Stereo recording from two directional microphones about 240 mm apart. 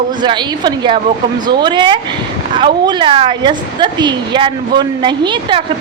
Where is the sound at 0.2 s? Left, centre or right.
Centre.